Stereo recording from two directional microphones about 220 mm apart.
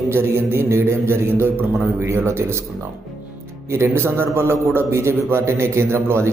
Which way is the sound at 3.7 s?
10° right (ahead or behind).